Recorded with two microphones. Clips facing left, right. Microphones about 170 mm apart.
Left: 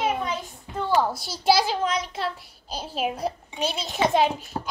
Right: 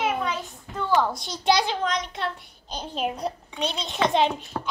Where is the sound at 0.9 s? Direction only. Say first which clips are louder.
Even; 5° left (ahead or behind).